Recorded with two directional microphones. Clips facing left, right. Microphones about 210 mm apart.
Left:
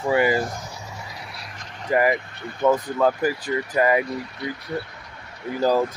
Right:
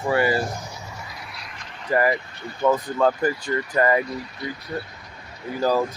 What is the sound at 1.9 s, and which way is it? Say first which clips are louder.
Speech: left 1 dB; 15° left (ahead or behind).